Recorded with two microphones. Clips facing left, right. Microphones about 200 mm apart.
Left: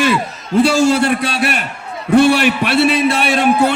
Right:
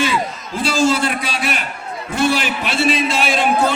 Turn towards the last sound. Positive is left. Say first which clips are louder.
# left 4 dB
turn(degrees=65)  # may be behind; listen again after turning